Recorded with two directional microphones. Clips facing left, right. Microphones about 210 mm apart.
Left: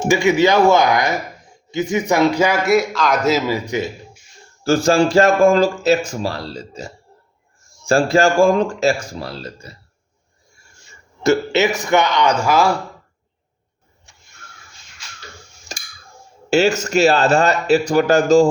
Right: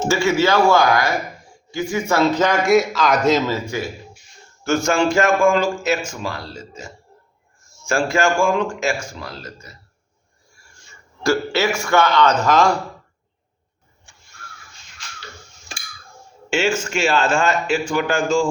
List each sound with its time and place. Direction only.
0.0 s a man's voice: 15° left (ahead or behind)
4.6 s speech: 35° left (ahead or behind)
11.2 s a man's voice: 20° left (ahead or behind)
15.7 s tick: 40° left (ahead or behind)
16.5 s speech: 40° left (ahead or behind)